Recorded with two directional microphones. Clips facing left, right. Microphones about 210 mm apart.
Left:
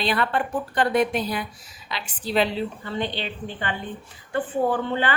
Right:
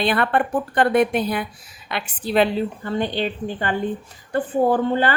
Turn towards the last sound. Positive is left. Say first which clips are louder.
# right 5 dB
turn(degrees=-40)  # may be behind; listen again after turning